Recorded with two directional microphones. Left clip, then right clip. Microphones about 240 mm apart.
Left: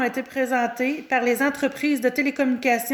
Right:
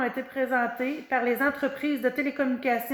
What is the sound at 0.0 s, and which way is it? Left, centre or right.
A woman's voice, left.